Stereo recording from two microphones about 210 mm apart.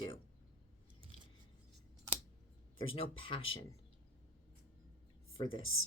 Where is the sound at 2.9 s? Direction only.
25° left (ahead or behind).